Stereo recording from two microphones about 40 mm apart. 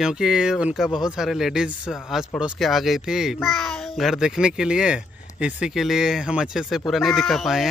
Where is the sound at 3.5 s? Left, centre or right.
Centre.